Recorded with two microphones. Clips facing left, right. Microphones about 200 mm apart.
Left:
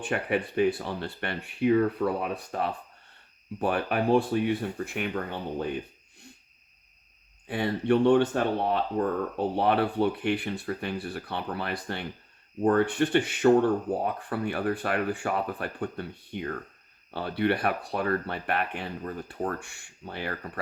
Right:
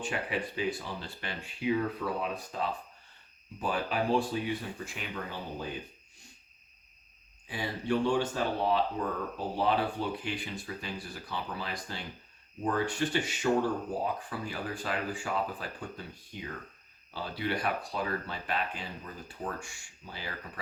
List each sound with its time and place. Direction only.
0.0 s speech: 60° left (ahead or behind)
7.4 s speech: 60° left (ahead or behind)